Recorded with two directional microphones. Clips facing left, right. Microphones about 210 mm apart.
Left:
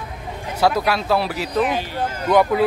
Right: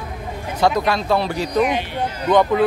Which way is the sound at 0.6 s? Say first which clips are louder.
Right 1 dB; 5° left (ahead or behind).